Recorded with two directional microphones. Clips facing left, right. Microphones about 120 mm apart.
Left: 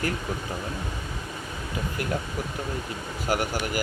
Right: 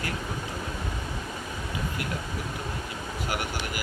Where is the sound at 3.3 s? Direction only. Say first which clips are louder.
Left 7 dB; 40° left (ahead or behind).